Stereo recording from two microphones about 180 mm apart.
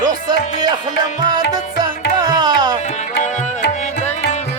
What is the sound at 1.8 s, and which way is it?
Music, 25° right (ahead or behind).